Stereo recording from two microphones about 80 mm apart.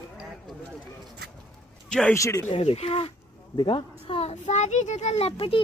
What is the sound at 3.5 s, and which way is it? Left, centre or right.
Speech, left.